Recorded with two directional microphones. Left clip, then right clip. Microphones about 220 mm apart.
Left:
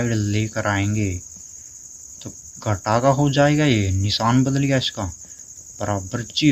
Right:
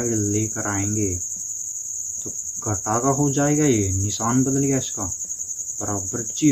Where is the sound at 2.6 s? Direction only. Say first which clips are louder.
Left 4 dB; 45° left (ahead or behind).